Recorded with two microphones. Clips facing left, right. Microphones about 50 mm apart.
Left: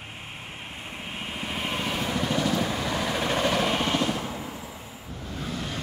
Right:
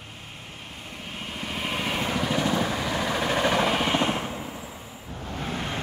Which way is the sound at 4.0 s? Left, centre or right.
Right.